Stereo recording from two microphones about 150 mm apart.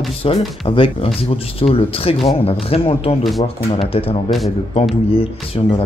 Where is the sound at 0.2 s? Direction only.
40° left (ahead or behind).